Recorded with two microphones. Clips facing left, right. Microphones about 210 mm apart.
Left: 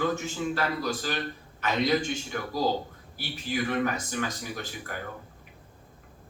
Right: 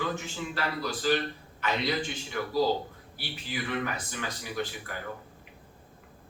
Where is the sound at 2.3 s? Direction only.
45° left (ahead or behind).